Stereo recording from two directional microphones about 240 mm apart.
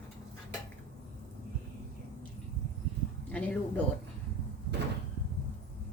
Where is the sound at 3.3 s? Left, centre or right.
Centre.